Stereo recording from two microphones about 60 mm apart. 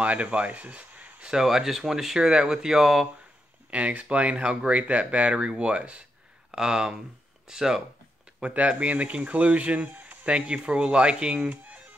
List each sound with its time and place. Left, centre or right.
0.0 s speech: right
1.2 s speech: centre
3.7 s speech: right
11.3 s speech: right